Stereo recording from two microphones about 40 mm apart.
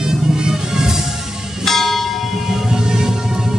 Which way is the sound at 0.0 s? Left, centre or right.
Centre.